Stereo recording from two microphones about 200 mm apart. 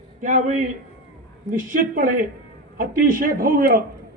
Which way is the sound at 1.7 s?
40° right (ahead or behind).